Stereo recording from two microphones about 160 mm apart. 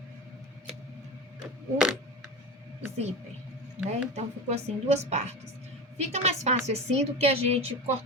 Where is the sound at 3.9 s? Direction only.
45° right (ahead or behind).